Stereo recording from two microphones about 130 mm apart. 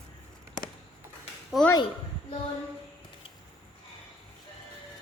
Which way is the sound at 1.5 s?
Centre (ahead or behind).